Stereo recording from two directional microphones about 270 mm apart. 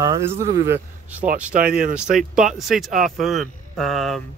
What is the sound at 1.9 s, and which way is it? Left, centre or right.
Speech, centre.